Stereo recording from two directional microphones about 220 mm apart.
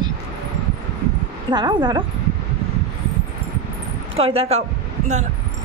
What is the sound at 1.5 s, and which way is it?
Speech, 20° right (ahead or behind).